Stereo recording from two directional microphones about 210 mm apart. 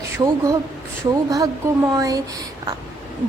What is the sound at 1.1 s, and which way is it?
Speech, 15° right (ahead or behind).